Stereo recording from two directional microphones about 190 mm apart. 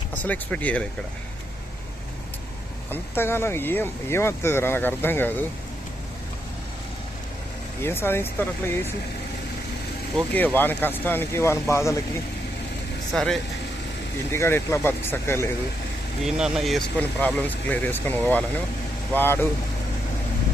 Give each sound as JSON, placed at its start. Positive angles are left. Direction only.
{"t": 0.2, "sound": "speech", "side_deg": 10}
{"t": 2.9, "sound": "speech", "side_deg": 10}
{"t": 7.8, "sound": "speech", "side_deg": 10}
{"t": 10.2, "sound": "speech", "side_deg": 10}
{"t": 13.1, "sound": "speech", "side_deg": 5}
{"t": 14.3, "sound": "speech", "side_deg": 15}
{"t": 16.2, "sound": "speech", "side_deg": 0}